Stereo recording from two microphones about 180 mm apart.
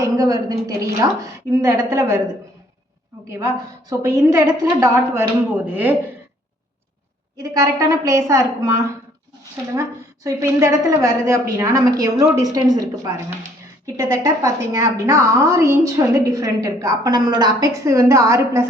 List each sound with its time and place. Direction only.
0.0 s a woman's voice: 20° right (ahead or behind)
3.3 s a woman's voice: 15° right (ahead or behind)
7.3 s a woman's voice: 20° right (ahead or behind)
10.2 s a woman's voice: 15° right (ahead or behind)